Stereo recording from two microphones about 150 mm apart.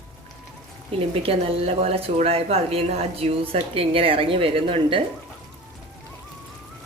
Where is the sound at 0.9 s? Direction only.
40° right (ahead or behind).